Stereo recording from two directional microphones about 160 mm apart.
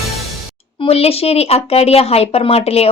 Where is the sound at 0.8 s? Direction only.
40° left (ahead or behind).